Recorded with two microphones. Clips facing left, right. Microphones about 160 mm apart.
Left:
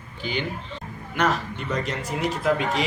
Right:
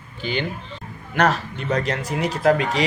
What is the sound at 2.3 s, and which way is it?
Speech, 85° right.